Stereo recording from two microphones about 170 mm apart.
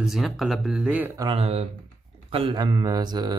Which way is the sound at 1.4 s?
35° right (ahead or behind).